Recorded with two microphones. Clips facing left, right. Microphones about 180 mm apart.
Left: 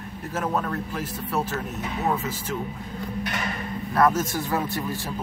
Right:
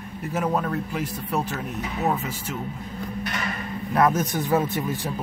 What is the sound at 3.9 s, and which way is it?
A man's voice, 20° right (ahead or behind).